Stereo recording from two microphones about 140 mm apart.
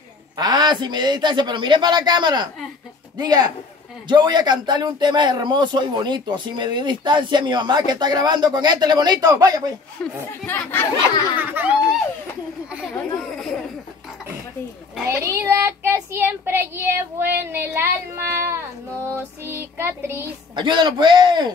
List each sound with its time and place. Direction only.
0.4 s a man's voice: 30° right (ahead or behind)
10.4 s speech: 15° left (ahead or behind)
11.3 s a child's voice: 15° right (ahead or behind)
12.9 s chatter: 5° left (ahead or behind)
15.0 s speech: 20° right (ahead or behind)
20.5 s a man's voice: 35° right (ahead or behind)